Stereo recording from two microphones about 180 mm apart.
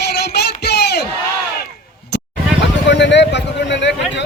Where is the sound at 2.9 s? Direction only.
75° left (ahead or behind).